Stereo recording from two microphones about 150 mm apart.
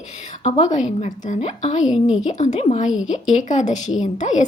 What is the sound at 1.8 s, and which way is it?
Speech, 5° right (ahead or behind).